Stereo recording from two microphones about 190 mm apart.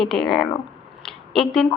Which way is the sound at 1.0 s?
Centre (ahead or behind).